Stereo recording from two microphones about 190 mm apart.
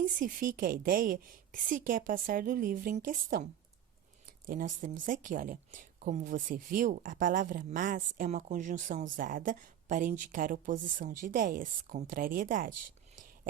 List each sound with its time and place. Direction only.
0.0 s speech: 45° right (ahead or behind)
4.4 s speech: 45° right (ahead or behind)